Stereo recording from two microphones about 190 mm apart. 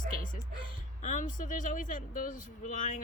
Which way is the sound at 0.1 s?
45° left (ahead or behind).